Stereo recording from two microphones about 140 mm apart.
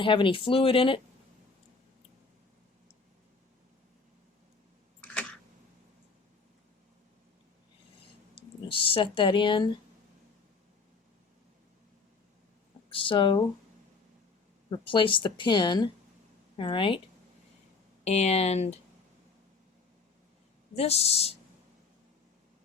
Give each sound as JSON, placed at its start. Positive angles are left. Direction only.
{"t": 0.0, "sound": "a woman's voice", "side_deg": 35}
{"t": 8.6, "sound": "speech", "side_deg": 40}
{"t": 12.9, "sound": "speech", "side_deg": 40}
{"t": 14.7, "sound": "a woman's voice", "side_deg": 35}
{"t": 18.0, "sound": "speech", "side_deg": 50}
{"t": 20.7, "sound": "speech", "side_deg": 45}